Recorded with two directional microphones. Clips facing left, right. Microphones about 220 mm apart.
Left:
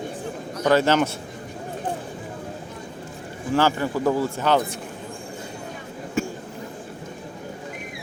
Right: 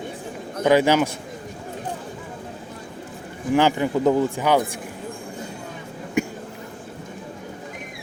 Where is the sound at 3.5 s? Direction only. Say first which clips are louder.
Right 2 dB; 15° right (ahead or behind).